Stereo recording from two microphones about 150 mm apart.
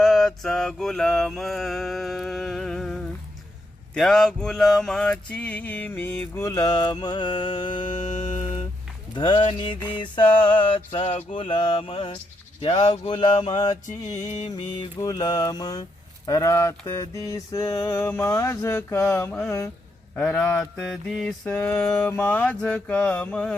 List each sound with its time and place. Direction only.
0.0 s mantra: centre (ahead or behind); by 7.9 s 30° left (ahead or behind)
7.9 s music: 55° left (ahead or behind)
9.1 s speech: 30° left (ahead or behind)
10.8 s speech: 35° left (ahead or behind)
14.3 s mantra: 50° left (ahead or behind)
14.5 s speech: 25° left (ahead or behind)
20.1 s mantra: 5° left (ahead or behind)